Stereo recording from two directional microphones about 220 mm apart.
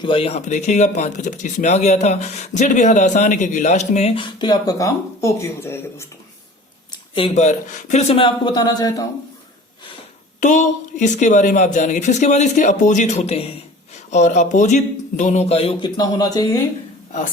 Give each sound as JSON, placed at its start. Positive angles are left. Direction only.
{"t": 0.0, "sound": "speech", "side_deg": 25}
{"t": 6.9, "sound": "a sound", "side_deg": 20}
{"t": 7.3, "sound": "speech", "side_deg": 35}
{"t": 10.4, "sound": "speech", "side_deg": 35}